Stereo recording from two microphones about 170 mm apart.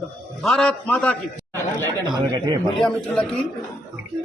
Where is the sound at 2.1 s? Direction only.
25° right (ahead or behind).